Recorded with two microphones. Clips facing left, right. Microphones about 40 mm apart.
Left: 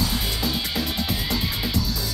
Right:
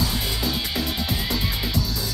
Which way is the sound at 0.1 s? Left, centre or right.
Centre.